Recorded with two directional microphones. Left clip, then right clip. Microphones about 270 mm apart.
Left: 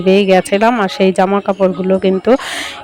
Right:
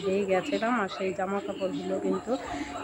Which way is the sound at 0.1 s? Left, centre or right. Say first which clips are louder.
Left 17 dB; left.